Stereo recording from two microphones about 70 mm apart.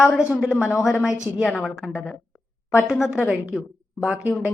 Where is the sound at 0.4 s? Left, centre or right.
Left.